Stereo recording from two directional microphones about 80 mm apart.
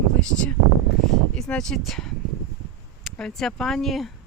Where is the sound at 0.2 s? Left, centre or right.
Centre.